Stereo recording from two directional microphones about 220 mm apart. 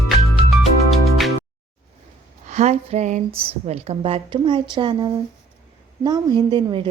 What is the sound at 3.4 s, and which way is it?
A woman's voice, 30° right (ahead or behind).